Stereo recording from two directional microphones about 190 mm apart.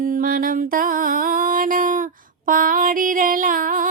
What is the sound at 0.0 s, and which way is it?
Music, 45° right (ahead or behind).